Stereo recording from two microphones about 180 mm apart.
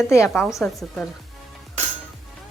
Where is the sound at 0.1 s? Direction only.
15° left (ahead or behind).